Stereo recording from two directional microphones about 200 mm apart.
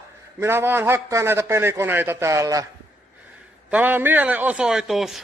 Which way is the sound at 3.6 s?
10° right (ahead or behind).